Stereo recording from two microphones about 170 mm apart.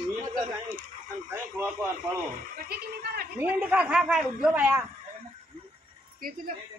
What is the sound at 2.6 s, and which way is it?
Gargling, 65° right (ahead or behind).